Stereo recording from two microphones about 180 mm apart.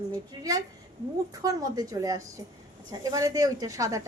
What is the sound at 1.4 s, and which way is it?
A woman's voice, 20° right (ahead or behind).